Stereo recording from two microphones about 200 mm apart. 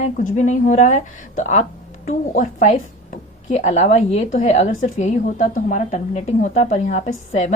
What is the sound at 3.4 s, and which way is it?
A woman's voice, 35° left (ahead or behind).